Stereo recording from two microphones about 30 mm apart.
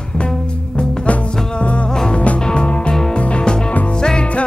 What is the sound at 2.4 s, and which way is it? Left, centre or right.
Music, left.